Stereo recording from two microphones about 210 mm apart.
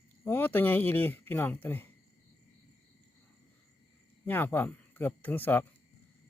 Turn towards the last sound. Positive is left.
turn(degrees=10)  # may be behind; listen again after turning